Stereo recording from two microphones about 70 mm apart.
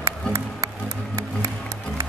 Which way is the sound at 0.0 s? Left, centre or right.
Right.